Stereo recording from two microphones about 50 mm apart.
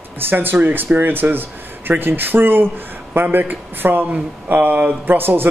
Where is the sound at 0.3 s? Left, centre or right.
Right.